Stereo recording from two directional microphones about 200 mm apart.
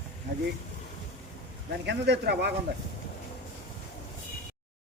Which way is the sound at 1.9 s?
55° right (ahead or behind).